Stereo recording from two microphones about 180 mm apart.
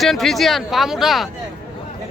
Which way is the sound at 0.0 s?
Centre (ahead or behind).